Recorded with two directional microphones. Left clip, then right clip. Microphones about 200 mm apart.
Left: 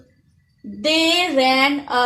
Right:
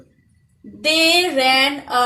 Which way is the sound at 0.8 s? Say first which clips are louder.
Right 2 dB; 40° left (ahead or behind).